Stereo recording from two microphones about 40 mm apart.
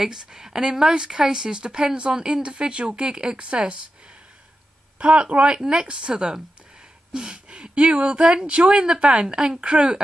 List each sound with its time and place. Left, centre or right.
0.0 s speech: centre
4.9 s speech: right
7.1 s a sound: right
7.4 s speech: right